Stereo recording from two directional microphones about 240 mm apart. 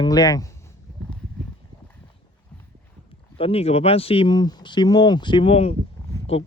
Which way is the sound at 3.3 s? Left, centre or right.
Left.